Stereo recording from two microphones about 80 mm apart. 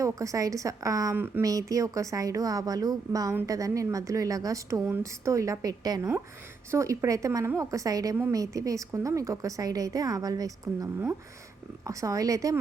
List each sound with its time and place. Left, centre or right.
0.0 s a woman's voice: right
6.7 s a woman's voice: right
11.9 s a woman's voice: right